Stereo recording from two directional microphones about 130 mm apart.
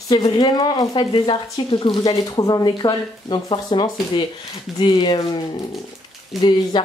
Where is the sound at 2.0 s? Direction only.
30° left (ahead or behind).